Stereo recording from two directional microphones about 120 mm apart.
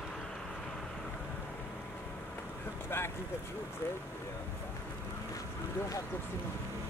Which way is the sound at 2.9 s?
20° left (ahead or behind).